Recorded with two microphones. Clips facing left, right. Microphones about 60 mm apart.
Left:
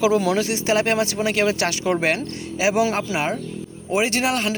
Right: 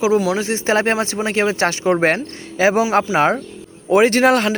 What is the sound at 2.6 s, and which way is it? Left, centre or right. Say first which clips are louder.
Speech: right 5 dB; right.